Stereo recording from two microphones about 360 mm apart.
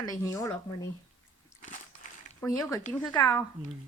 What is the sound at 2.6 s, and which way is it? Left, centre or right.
Speech, centre.